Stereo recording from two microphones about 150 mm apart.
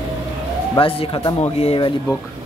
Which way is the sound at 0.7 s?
35° left (ahead or behind).